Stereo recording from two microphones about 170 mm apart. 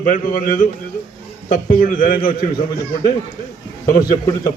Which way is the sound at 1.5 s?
60° left (ahead or behind).